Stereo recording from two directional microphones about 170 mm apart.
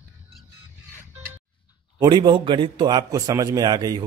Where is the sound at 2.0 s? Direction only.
25° right (ahead or behind).